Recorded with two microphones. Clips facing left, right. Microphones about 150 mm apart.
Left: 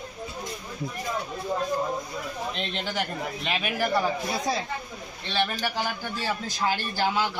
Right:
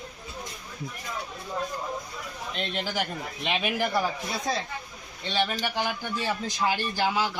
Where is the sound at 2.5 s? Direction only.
Centre (ahead or behind).